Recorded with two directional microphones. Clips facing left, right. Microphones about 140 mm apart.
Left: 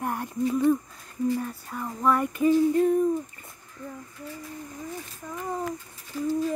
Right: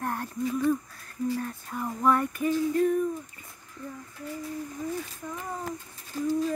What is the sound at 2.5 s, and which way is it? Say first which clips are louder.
Female singing: left 4 dB; 25° left (ahead or behind).